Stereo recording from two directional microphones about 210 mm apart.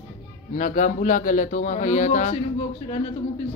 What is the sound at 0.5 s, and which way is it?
A man's voice, 40° left (ahead or behind).